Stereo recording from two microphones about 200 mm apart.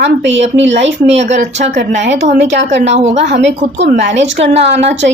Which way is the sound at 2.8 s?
30° right (ahead or behind).